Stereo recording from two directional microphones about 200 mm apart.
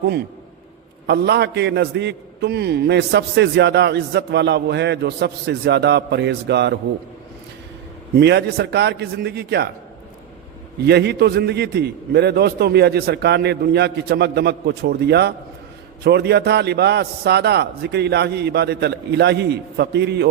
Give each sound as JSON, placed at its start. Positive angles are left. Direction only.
{"t": 1.0, "sound": "a man's voice", "side_deg": -55}
{"t": 8.2, "sound": "a man's voice", "side_deg": -55}
{"t": 10.8, "sound": "a man's voice", "side_deg": -55}